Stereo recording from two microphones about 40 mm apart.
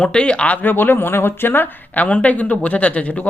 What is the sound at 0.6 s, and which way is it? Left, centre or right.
Speech, left.